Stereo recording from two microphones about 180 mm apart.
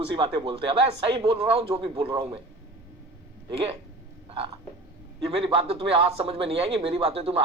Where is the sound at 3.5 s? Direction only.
30° right (ahead or behind).